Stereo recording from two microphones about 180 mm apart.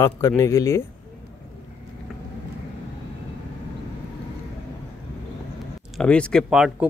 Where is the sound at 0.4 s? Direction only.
15° left (ahead or behind).